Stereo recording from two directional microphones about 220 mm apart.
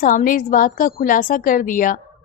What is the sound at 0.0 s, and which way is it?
A woman's voice, 40° left (ahead or behind).